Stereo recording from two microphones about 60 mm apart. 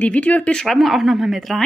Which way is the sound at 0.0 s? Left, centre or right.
Left.